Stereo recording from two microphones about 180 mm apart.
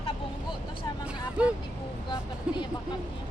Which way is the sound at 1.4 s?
5° right (ahead or behind).